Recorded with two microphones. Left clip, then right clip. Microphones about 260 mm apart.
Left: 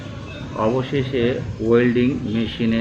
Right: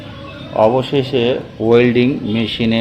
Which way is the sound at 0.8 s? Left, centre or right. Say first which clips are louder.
Right 5 dB; centre.